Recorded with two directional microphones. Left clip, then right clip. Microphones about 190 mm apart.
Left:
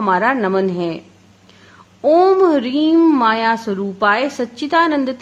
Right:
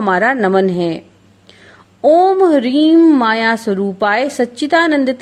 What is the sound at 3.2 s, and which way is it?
A woman's voice, 20° right (ahead or behind).